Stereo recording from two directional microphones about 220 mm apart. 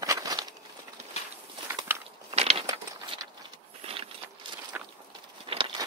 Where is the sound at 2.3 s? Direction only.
30° right (ahead or behind).